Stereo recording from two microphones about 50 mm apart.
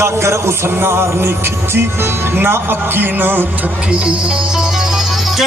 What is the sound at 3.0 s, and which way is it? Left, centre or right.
Music, right.